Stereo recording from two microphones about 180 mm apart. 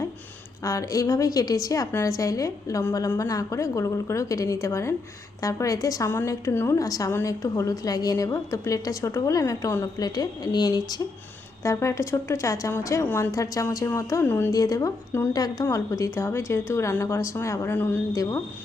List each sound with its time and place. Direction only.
0.6 s a woman's voice: 20° left (ahead or behind)